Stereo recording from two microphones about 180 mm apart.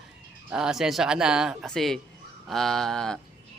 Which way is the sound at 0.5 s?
5° right (ahead or behind).